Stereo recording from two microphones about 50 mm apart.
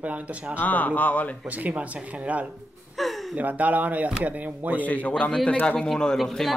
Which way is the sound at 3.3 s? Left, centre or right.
Right.